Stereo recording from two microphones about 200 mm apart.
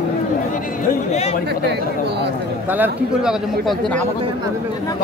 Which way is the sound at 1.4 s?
55° right (ahead or behind).